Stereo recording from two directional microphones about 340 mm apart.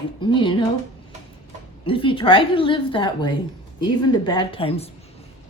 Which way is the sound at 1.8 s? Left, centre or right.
Centre.